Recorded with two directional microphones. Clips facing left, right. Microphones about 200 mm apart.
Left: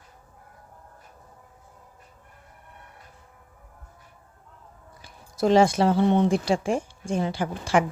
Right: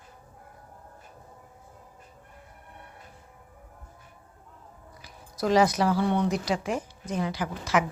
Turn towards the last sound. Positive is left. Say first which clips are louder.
# left 3 dB
turn(degrees=30)  # may be behind; listen again after turning